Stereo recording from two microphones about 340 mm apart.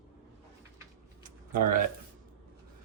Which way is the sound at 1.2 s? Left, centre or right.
Right.